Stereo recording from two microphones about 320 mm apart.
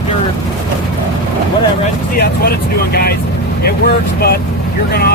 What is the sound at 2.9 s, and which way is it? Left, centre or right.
Speech, left.